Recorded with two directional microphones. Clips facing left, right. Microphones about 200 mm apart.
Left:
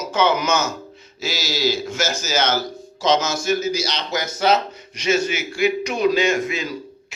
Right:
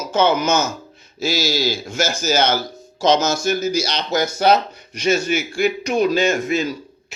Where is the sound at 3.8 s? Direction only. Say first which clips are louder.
Right 4 dB; 55° right (ahead or behind).